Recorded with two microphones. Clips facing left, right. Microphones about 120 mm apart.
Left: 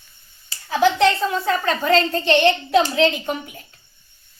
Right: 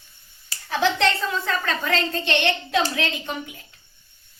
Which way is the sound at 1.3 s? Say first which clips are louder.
Left 5 dB; 25° left (ahead or behind).